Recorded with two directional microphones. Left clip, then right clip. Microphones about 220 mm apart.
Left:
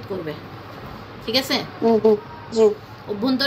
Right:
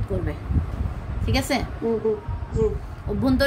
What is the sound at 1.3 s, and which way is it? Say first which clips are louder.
Speech: left 3 dB; 35° right (ahead or behind).